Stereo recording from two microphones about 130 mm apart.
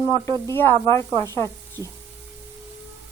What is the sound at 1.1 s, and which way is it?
Speech, 30° right (ahead or behind).